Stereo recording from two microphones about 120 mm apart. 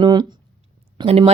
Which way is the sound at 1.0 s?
55° right (ahead or behind).